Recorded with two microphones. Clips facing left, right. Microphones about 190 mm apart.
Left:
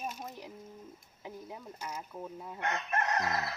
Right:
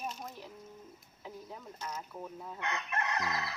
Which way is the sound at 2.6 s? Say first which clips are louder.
Left 4 dB; 45° left (ahead or behind).